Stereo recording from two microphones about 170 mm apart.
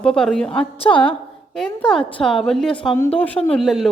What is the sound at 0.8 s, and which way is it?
Speech, 30° left (ahead or behind).